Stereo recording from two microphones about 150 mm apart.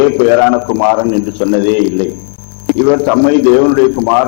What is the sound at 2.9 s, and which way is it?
A man's voice, 20° left (ahead or behind).